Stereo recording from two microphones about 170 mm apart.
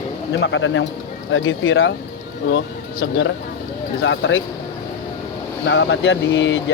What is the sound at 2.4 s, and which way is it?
Speech, 90° left.